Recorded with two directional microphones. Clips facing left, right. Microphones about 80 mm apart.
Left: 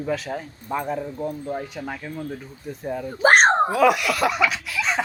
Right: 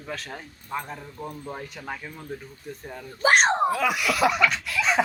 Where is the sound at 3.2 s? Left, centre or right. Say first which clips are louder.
Left 4 dB; left.